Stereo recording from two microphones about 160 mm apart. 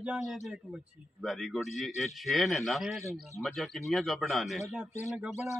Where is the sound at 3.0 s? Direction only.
15° right (ahead or behind).